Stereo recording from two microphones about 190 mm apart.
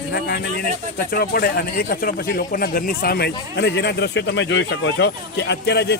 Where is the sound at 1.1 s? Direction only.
55° left (ahead or behind).